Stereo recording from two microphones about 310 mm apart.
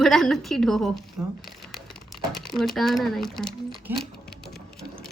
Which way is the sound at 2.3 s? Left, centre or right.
Centre.